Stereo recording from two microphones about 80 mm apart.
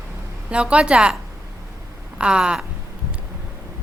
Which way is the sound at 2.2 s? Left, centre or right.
Centre.